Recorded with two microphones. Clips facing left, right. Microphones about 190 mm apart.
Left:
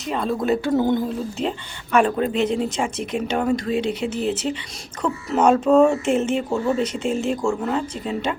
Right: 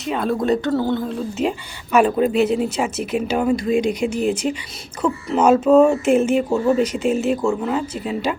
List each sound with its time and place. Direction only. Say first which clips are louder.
0.0 s speech: right 2 dB; centre (ahead or behind)
0.7 s a sound: left 1 dB; 20° left (ahead or behind)
1.5 s speech: right 3 dB; 10° right (ahead or behind)